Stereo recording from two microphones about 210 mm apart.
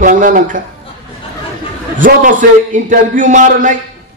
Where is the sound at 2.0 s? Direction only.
40° right (ahead or behind).